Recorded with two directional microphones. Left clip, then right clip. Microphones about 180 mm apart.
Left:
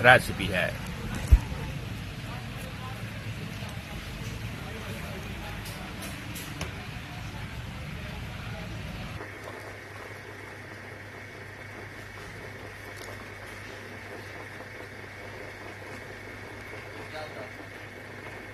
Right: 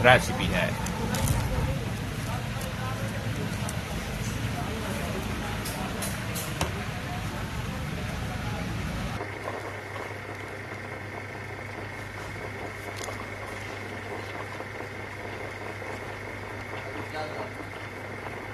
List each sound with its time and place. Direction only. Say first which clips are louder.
0.0 s speech: left 1 dB; 20° left (ahead or behind)